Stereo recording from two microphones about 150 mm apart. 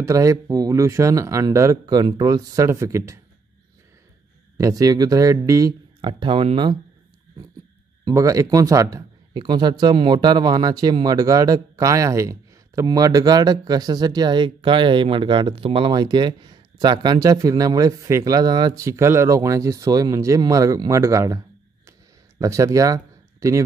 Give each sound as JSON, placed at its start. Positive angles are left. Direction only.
{"t": 0.0, "sound": "a man's voice", "side_deg": -20}
{"t": 4.6, "sound": "a man's voice", "side_deg": -20}
{"t": 8.0, "sound": "a man's voice", "side_deg": -20}